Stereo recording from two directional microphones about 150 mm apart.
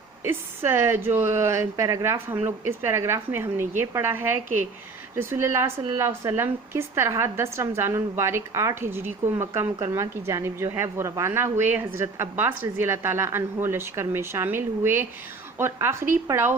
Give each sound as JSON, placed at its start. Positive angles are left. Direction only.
{"t": 0.3, "sound": "a woman's voice", "side_deg": -15}